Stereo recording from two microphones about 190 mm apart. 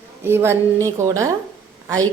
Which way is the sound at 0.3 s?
10° right (ahead or behind).